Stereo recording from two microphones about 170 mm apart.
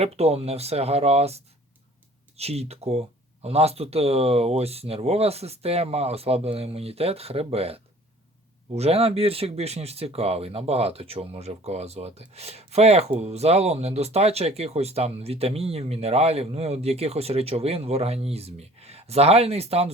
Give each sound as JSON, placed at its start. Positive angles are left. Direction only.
{"t": 0.0, "sound": "speech", "side_deg": -35}